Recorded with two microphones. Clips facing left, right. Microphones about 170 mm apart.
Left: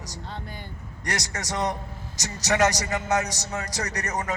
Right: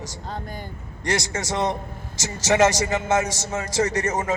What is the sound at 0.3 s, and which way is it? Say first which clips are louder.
Speech: right 6 dB; 45° right (ahead or behind).